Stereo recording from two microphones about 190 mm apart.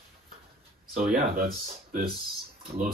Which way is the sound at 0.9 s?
45° right (ahead or behind).